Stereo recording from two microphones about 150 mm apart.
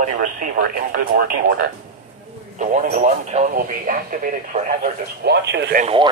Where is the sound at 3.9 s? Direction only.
65° right (ahead or behind).